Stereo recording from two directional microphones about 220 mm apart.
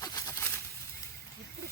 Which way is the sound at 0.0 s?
15° left (ahead or behind).